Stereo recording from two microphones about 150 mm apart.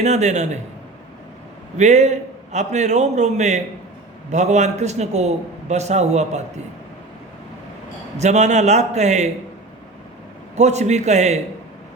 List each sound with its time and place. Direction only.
0.0 s a man's voice: 50° right (ahead or behind)
1.8 s a man's voice: 50° right (ahead or behind)
8.2 s a man's voice: 50° right (ahead or behind)
10.5 s a man's voice: 50° right (ahead or behind)